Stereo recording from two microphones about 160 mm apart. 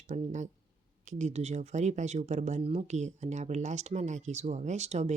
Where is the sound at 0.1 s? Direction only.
50° right (ahead or behind).